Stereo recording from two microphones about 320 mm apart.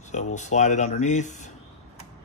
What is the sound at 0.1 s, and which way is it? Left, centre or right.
Speech, left.